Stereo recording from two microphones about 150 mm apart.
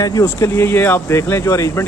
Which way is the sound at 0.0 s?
25° left (ahead or behind).